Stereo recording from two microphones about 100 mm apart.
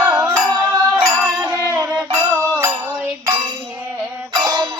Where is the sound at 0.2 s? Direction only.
35° right (ahead or behind).